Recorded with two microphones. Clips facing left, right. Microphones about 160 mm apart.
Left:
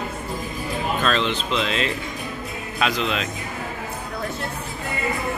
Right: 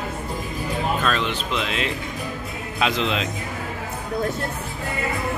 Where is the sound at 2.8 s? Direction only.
20° right (ahead or behind).